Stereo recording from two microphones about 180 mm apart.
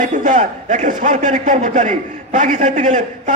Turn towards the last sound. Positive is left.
turn(degrees=-45)  # may be behind; listen again after turning